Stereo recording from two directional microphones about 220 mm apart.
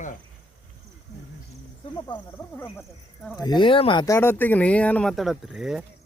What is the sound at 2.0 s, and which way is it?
Speech, 15° left (ahead or behind).